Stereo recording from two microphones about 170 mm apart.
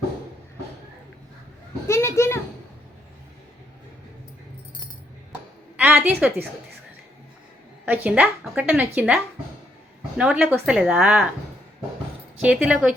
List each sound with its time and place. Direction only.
1.9 s a child's voice: 15° left (ahead or behind)
5.7 s a sound: 10° right (ahead or behind)
7.9 s a woman's voice: 10° right (ahead or behind)
12.4 s a woman's voice: 5° right (ahead or behind)